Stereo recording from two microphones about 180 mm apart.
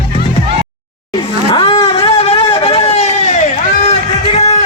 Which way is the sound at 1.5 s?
30° left (ahead or behind).